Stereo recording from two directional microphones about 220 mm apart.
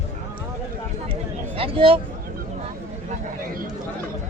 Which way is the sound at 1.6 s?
25° right (ahead or behind).